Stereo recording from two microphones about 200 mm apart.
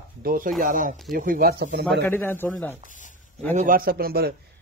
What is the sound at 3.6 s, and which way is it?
Speech, 45° right (ahead or behind).